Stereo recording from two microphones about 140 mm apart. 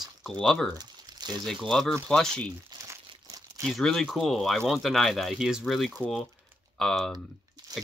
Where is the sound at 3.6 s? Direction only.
Centre (ahead or behind).